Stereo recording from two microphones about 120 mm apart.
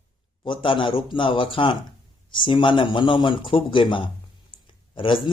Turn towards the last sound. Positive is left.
turn(degrees=45)  # may be behind; listen again after turning